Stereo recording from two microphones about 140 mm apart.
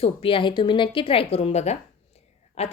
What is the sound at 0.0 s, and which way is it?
A woman's voice, 40° left (ahead or behind).